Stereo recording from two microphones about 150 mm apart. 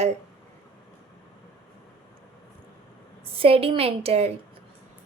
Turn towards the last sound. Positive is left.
turn(degrees=-40)  # may be behind; listen again after turning